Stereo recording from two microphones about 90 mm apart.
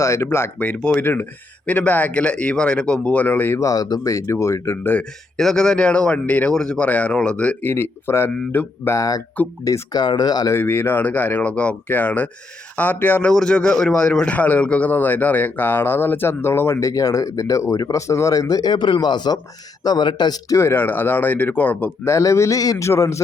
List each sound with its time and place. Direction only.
0.0 s speech: 35° left (ahead or behind)
0.6 s speech: 15° left (ahead or behind)
3.6 s speech: 40° left (ahead or behind)
5.4 s speech: 5° left (ahead or behind)
7.6 s a man's voice: 25° left (ahead or behind)
9.0 s speech: 40° left (ahead or behind)
9.9 s speech: 55° left (ahead or behind)
10.5 s a man's voice: 25° left (ahead or behind)
13.3 s a man's voice: 10° left (ahead or behind); by 20.6 s 50° left (ahead or behind)
20.6 s a man's voice: 25° left (ahead or behind)
22.0 s speech: 35° left (ahead or behind)